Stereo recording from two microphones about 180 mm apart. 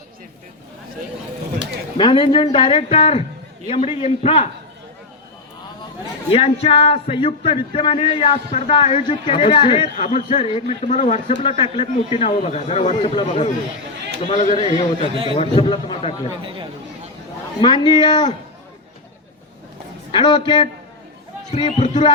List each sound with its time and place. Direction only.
2.0 s speech: 25° left (ahead or behind)
6.3 s speech: 35° left (ahead or behind)
15.1 s a man's voice: 30° right (ahead or behind)
15.4 s speech: 30° left (ahead or behind)
16.4 s speech: 30° right (ahead or behind)
17.6 s speech: 25° left (ahead or behind)
20.1 s speech: 25° left (ahead or behind)